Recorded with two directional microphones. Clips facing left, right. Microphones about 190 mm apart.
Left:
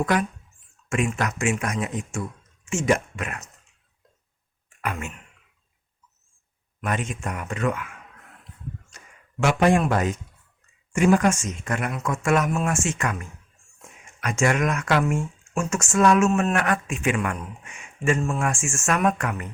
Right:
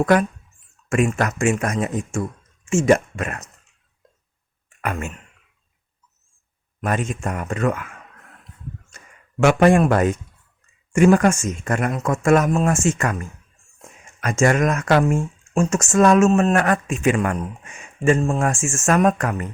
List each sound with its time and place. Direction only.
0.0 s speech: 50° right (ahead or behind)
4.8 s speech: 45° right (ahead or behind)
6.8 s speech: 45° right (ahead or behind)
9.4 s speech: 55° right (ahead or behind); by 19.5 s 40° right (ahead or behind)